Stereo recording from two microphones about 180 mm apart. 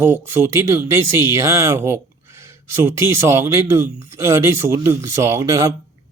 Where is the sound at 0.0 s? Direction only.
15° right (ahead or behind).